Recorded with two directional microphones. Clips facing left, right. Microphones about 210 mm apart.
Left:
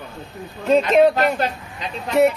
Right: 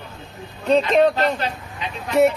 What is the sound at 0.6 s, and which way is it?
A man's voice, 5° left (ahead or behind).